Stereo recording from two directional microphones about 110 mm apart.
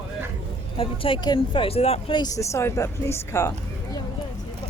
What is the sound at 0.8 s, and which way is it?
Speech, 55° left (ahead or behind).